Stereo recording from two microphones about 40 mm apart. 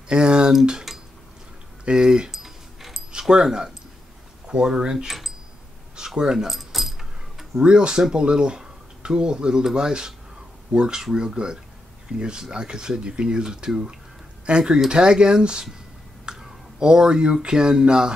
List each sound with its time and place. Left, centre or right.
0.1 s speech: right
0.9 s dishes: centre
1.9 s speech: centre
2.3 s a sound: centre
3.1 s speech: centre
5.9 s keys jangling: right
6.4 s keys jangling: centre
7.6 s speech: right
16.3 s a sound: right
16.8 s speech: centre